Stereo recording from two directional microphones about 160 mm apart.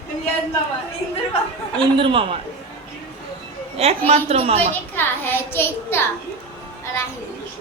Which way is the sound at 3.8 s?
40° right (ahead or behind).